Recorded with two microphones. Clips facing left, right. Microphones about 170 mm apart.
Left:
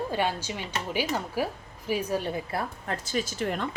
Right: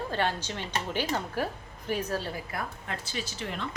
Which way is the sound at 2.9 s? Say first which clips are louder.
Left 9 dB; 45° left (ahead or behind).